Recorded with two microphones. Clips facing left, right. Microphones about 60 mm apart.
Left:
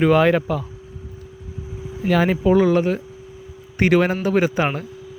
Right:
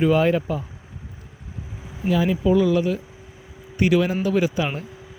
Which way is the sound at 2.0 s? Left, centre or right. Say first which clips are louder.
Left 3 dB; left.